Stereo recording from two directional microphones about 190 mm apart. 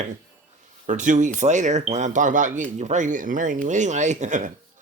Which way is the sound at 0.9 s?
40° right (ahead or behind).